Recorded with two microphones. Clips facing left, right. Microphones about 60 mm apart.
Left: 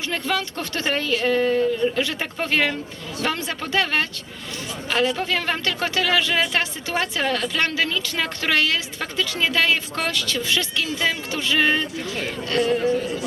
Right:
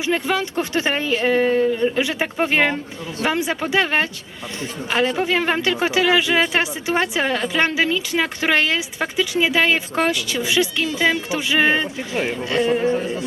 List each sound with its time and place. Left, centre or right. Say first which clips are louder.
0.0 s speech: right 4 dB; centre
5.1 s speech: right 5 dB; centre